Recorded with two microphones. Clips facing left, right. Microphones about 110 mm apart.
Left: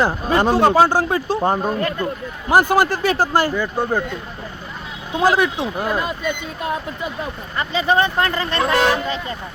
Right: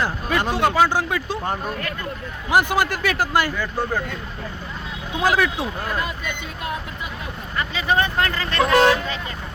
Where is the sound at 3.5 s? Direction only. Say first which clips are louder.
Left 4 dB; 20° left (ahead or behind).